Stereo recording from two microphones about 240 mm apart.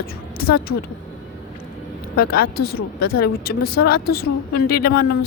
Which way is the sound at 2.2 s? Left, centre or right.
Left.